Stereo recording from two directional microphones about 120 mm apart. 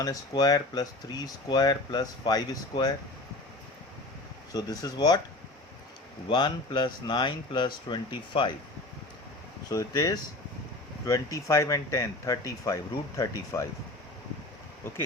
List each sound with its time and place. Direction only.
0.0 s speech: 30° left (ahead or behind)
4.5 s speech: 35° left (ahead or behind)
6.2 s speech: 45° left (ahead or behind)
9.6 s speech: 30° left (ahead or behind)
14.8 s speech: 20° left (ahead or behind)